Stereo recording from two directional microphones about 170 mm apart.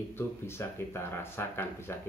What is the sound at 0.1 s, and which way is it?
Speech, 15° left (ahead or behind).